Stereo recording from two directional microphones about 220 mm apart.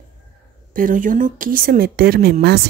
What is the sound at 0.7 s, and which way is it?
Speech, 40° right (ahead or behind).